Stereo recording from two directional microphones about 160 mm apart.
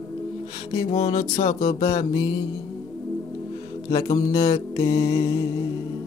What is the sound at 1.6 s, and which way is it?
Music, 25° left (ahead or behind).